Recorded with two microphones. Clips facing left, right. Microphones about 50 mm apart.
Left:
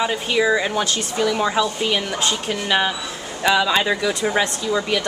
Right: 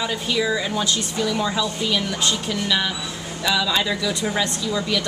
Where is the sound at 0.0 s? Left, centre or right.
Left.